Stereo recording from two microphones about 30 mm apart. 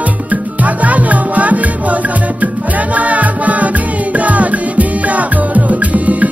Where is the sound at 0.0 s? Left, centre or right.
Right.